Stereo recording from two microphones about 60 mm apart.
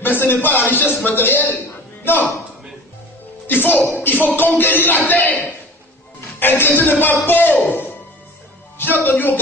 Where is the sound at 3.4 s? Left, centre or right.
Left.